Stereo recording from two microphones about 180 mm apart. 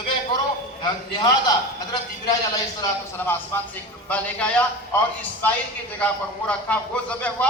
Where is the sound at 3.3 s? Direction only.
10° left (ahead or behind).